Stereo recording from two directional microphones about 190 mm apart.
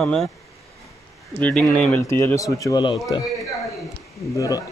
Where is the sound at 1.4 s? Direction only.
5° left (ahead or behind); by 3.2 s 25° left (ahead or behind).